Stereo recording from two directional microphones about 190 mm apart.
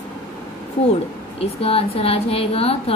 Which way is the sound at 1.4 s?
30° left (ahead or behind).